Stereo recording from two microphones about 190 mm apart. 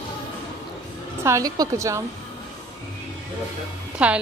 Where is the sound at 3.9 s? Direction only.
5° right (ahead or behind).